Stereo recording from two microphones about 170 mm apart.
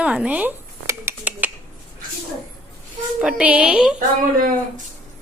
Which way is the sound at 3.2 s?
5° right (ahead or behind).